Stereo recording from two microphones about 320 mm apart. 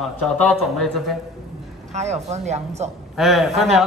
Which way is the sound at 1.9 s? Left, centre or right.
Right.